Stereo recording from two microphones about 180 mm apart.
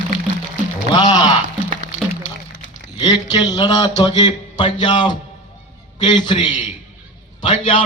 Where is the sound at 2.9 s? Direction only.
25° left (ahead or behind).